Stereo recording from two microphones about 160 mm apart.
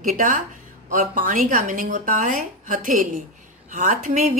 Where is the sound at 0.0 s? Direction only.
55° right (ahead or behind).